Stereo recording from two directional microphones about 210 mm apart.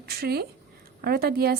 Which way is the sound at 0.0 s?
50° right (ahead or behind).